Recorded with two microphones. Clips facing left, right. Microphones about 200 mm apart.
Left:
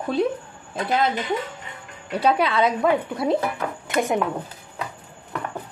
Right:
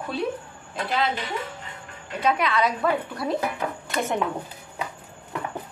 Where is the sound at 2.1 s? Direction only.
30° left (ahead or behind).